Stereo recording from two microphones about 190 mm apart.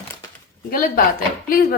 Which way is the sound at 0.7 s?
45° left (ahead or behind).